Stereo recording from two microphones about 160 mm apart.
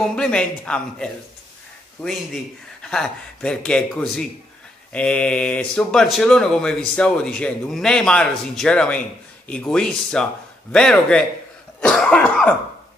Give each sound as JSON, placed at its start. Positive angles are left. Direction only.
{"t": 0.1, "sound": "speech", "side_deg": 5}
{"t": 11.8, "sound": "cough", "side_deg": 5}